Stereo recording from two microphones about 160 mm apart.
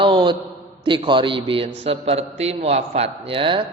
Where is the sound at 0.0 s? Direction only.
30° right (ahead or behind).